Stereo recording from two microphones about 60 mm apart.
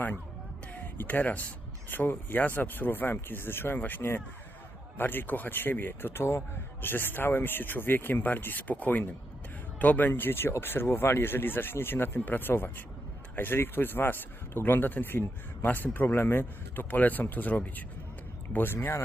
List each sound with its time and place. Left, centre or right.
0.7 s speech: left
10.1 s speech: left
18.5 s speech: left